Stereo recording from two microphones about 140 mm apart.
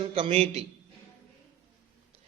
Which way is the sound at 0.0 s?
45° right (ahead or behind).